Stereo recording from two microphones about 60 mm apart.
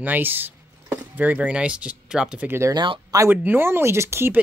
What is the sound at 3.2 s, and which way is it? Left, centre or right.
Speech, right.